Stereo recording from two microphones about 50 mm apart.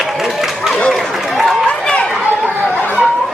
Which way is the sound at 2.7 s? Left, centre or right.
Left.